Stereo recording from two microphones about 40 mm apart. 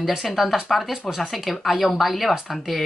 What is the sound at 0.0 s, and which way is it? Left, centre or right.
Speech, centre.